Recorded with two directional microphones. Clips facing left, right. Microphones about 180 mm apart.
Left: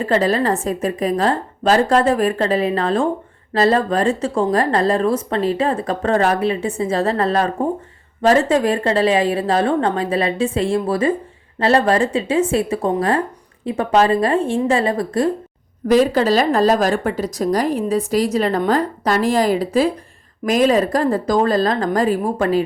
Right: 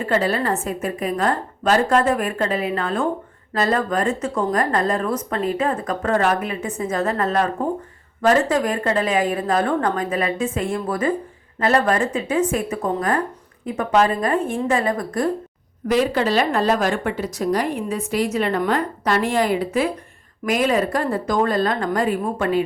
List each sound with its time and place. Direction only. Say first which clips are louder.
0.1 s a woman's voice: left 3 dB; 35° left (ahead or behind)
15.9 s a woman's voice: left 5 dB; 40° left (ahead or behind)